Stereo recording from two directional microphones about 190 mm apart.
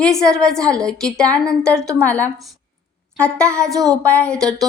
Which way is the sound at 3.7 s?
20° right (ahead or behind).